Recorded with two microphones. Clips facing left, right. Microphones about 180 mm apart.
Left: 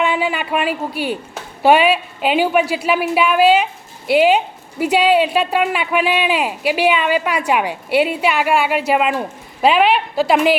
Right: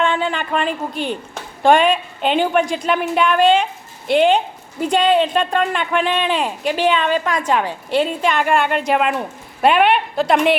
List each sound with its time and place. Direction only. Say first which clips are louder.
0.0 s a woman's voice: left 1 dB; 5° left (ahead or behind)